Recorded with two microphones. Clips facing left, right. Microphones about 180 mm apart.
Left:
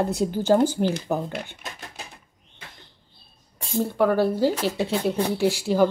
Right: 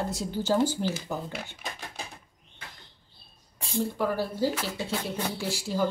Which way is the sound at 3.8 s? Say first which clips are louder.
Left 7 dB; 65° left (ahead or behind).